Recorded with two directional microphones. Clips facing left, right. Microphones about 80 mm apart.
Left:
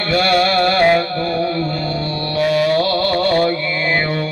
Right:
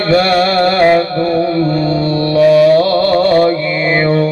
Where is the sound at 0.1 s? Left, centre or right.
Right.